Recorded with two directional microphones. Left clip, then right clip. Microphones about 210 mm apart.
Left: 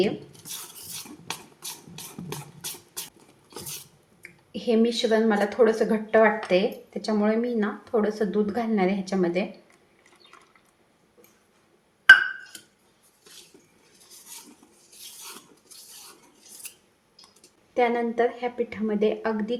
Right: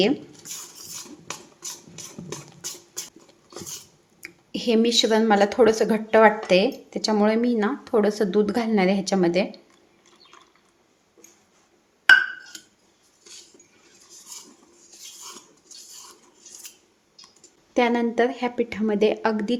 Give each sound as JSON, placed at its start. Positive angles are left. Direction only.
{"t": 4.2, "sound": "a woman's voice", "side_deg": -50}
{"t": 17.7, "sound": "a woman's voice", "side_deg": -50}